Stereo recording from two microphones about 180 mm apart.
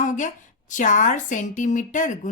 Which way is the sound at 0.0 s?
45° left (ahead or behind).